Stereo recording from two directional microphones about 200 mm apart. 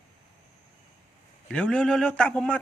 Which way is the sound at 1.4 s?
5° left (ahead or behind).